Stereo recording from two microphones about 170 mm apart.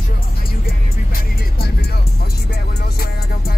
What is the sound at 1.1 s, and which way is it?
Music, 65° left (ahead or behind).